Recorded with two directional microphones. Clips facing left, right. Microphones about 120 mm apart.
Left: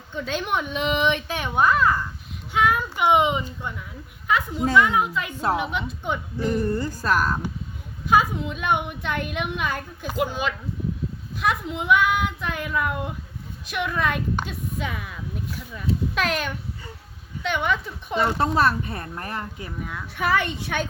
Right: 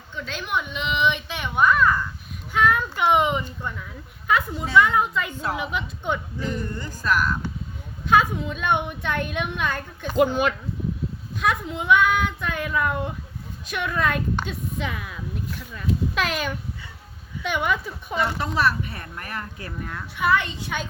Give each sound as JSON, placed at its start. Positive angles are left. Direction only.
{"t": 0.1, "sound": "a child's voice", "side_deg": 50}
{"t": 2.5, "sound": "speech", "side_deg": 15}
{"t": 4.3, "sound": "speech", "side_deg": 0}
{"t": 6.6, "sound": "speech", "side_deg": 35}
{"t": 8.0, "sound": "speech", "side_deg": 5}
{"t": 10.2, "sound": "speech", "side_deg": -55}
{"t": 11.3, "sound": "speech", "side_deg": 0}
{"t": 18.2, "sound": "speech", "side_deg": 40}
{"t": 19.8, "sound": "speech", "side_deg": 5}
{"t": 20.1, "sound": "a child's voice", "side_deg": 60}